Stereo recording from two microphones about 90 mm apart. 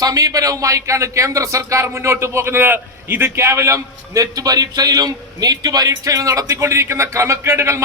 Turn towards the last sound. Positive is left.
turn(degrees=-30)  # may be behind; listen again after turning